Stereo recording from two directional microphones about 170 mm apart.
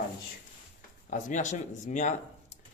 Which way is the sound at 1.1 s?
50° left (ahead or behind).